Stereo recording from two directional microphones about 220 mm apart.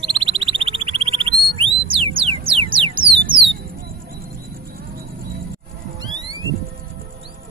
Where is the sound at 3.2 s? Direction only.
20° right (ahead or behind).